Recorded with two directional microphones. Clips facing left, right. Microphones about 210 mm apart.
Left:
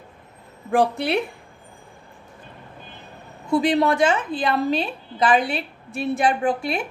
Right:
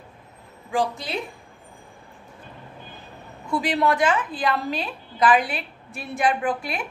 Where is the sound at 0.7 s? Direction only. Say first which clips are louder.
Left 6 dB; 60° left (ahead or behind).